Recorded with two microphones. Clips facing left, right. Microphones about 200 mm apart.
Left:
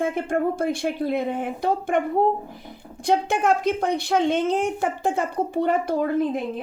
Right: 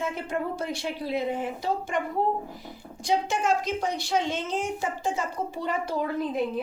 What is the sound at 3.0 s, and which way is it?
A woman's voice, 60° left (ahead or behind).